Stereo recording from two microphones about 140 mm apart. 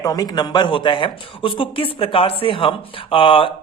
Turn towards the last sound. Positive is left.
turn(degrees=40)  # may be behind; listen again after turning